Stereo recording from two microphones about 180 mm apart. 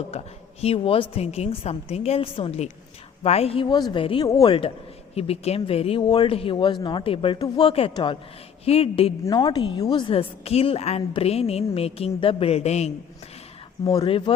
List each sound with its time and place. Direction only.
0.1 s a woman's voice: 35° left (ahead or behind)
4.3 s speech: 20° left (ahead or behind)
5.1 s a woman's voice: 35° left (ahead or behind)
13.9 s speech: 30° left (ahead or behind)